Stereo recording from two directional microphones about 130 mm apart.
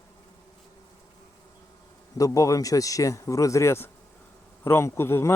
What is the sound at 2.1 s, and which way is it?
Speech, 25° left (ahead or behind).